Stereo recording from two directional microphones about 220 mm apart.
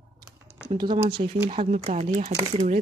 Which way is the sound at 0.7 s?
20° right (ahead or behind).